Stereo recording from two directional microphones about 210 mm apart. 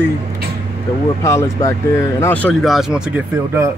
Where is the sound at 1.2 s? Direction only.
15° left (ahead or behind); by 3.7 s 10° right (ahead or behind).